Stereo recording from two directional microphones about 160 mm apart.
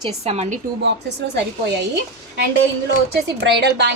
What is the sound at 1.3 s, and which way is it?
Speech, 90° right.